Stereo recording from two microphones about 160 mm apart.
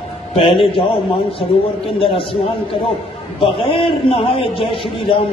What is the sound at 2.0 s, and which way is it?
Speech, 35° left (ahead or behind).